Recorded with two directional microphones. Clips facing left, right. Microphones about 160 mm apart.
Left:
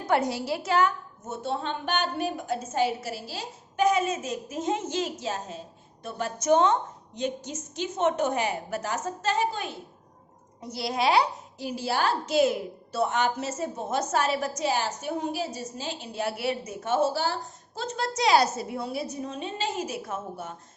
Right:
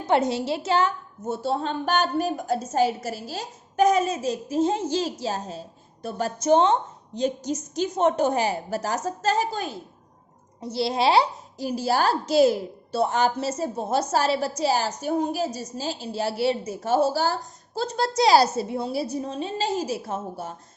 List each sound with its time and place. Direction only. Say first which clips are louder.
0.0 s a woman's voice: right 3 dB; 25° right (ahead or behind)